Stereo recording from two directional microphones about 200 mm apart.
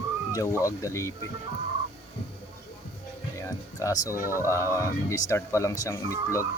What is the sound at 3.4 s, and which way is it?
Music, 15° left (ahead or behind).